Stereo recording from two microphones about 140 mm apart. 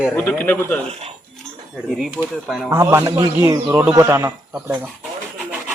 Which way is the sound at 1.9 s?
Centre (ahead or behind).